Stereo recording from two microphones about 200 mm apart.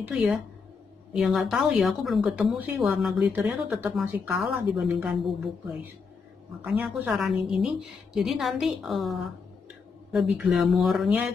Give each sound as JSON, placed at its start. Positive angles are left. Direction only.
{"t": 0.0, "sound": "speech", "side_deg": -5}